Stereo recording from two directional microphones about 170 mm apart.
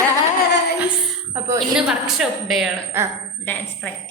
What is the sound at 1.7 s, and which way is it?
Speech, 5° right (ahead or behind).